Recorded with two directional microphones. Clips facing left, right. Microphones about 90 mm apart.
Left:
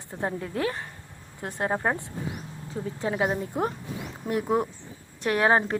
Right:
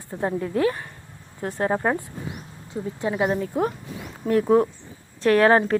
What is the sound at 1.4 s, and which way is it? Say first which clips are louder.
Speech: right 5 dB; 20° left (ahead or behind).